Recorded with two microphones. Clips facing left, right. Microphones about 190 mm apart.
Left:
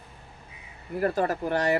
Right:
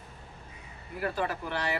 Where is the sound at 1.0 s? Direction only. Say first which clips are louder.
Left 6 dB; 45° left (ahead or behind).